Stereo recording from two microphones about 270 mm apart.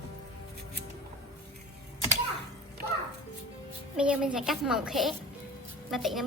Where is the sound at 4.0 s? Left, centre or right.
Centre.